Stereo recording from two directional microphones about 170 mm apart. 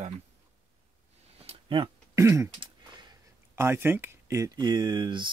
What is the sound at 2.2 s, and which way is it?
Throat clearing, 15° right (ahead or behind).